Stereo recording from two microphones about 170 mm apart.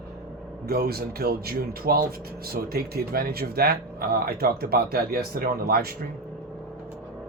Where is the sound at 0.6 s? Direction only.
65° right (ahead or behind).